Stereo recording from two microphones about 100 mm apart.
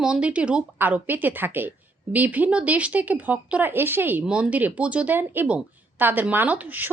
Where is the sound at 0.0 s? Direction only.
10° right (ahead or behind).